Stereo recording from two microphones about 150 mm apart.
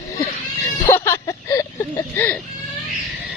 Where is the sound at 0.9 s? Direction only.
15° left (ahead or behind).